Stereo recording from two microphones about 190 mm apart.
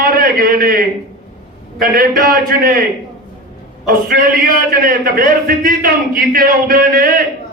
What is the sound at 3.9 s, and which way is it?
A man's voice, 50° right (ahead or behind).